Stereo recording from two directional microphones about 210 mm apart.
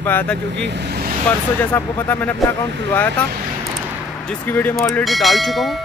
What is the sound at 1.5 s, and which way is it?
Speech, 10° left (ahead or behind).